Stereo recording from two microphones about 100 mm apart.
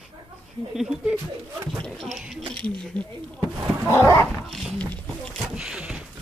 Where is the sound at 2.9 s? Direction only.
45° right (ahead or behind).